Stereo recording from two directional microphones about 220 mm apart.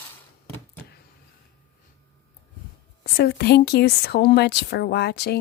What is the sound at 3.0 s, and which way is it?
A woman's voice, 45° left (ahead or behind).